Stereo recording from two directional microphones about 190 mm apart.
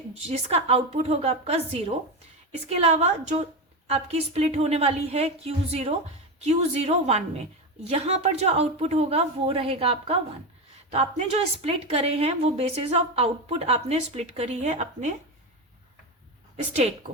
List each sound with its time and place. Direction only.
0.3 s a woman's voice: 35° right (ahead or behind)